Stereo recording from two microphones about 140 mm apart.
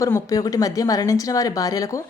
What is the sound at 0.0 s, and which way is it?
A woman's voice, 25° left (ahead or behind).